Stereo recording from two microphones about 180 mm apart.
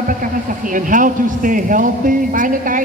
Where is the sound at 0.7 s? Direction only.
50° right (ahead or behind).